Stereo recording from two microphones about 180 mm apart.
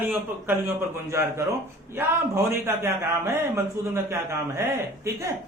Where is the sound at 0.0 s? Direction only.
10° right (ahead or behind).